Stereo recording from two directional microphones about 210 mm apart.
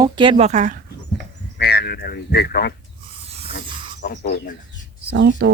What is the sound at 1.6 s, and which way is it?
Speech, 50° left (ahead or behind).